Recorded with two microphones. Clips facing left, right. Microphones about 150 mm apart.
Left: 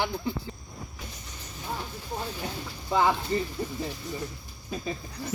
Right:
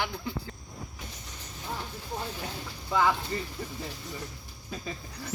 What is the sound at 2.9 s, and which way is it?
Speech, 25° left (ahead or behind).